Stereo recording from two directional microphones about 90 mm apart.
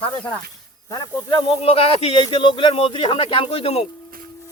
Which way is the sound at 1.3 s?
80° left.